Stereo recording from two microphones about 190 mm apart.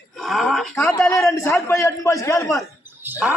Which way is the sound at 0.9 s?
10° left (ahead or behind).